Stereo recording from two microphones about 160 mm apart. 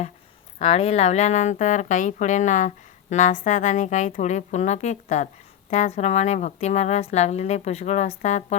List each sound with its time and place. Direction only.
0.6 s a woman's voice: 40° left (ahead or behind)